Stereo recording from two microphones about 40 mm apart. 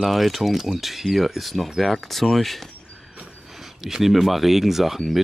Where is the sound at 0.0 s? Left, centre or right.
Centre.